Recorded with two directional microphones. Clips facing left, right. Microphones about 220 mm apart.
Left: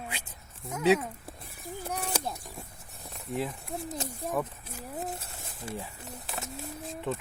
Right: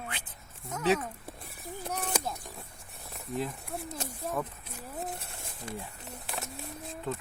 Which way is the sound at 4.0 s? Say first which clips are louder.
Left 2 dB; 5° left (ahead or behind).